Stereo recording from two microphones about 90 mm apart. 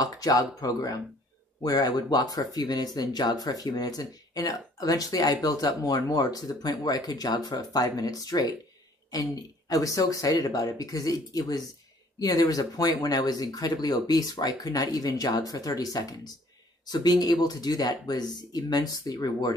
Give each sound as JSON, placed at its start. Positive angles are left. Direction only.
{"t": 0.0, "sound": "speech", "side_deg": 45}